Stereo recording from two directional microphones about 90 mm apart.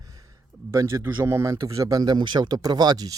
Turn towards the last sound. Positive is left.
turn(degrees=-50)  # may be behind; listen again after turning